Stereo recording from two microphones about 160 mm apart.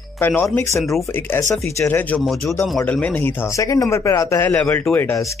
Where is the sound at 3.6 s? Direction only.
20° left (ahead or behind).